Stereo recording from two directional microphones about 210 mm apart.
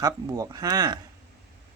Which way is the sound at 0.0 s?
15° right (ahead or behind).